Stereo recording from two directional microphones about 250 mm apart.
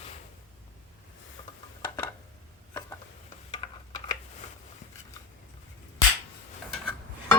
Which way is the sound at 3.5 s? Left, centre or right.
Centre.